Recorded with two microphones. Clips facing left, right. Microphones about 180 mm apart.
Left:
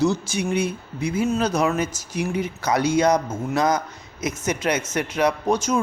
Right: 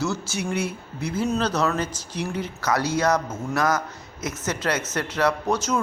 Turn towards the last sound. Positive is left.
turn(degrees=15)  # may be behind; listen again after turning